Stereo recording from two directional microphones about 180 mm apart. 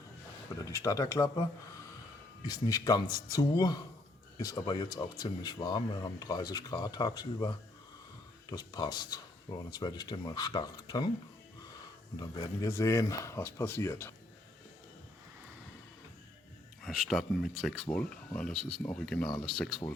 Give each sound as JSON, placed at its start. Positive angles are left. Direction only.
{"t": 0.6, "sound": "speech", "side_deg": 15}
{"t": 2.5, "sound": "speech", "side_deg": 20}
{"t": 12.1, "sound": "speech", "side_deg": 20}
{"t": 16.8, "sound": "speech", "side_deg": 0}